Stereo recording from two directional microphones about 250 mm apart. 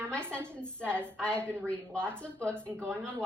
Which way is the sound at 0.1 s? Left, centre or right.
Centre.